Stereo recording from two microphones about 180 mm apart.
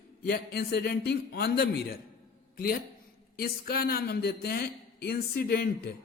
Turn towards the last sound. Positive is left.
turn(degrees=60)  # may be behind; listen again after turning